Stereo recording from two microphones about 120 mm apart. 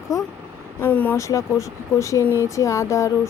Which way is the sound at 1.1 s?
25° left (ahead or behind).